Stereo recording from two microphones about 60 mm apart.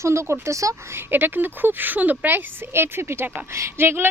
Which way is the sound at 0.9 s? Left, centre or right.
Right.